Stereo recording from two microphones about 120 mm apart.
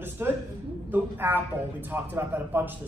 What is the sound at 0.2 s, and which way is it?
A man's voice, 25° right (ahead or behind).